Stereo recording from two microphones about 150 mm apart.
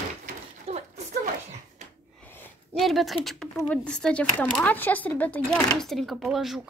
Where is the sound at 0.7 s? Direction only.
45° right (ahead or behind).